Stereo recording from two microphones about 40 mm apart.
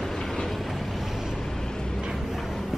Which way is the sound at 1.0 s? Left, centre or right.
Centre.